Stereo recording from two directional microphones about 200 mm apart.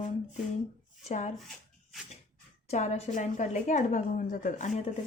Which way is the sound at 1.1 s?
35° left (ahead or behind).